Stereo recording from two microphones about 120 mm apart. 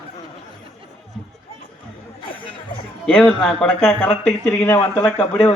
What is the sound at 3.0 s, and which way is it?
Speech, 10° left (ahead or behind).